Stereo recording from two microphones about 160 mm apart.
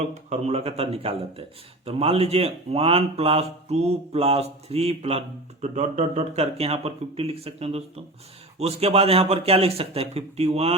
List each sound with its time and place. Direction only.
0.1 s speech: 45° right (ahead or behind)